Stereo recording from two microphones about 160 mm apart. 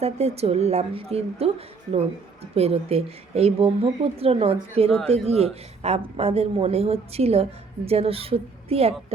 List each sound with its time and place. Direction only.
0.0 s a woman's voice: 40° right (ahead or behind)